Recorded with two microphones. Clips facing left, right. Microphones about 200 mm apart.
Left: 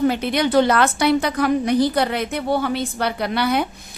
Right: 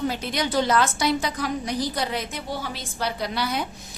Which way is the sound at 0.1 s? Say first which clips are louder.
Left 8 dB; 60° left (ahead or behind).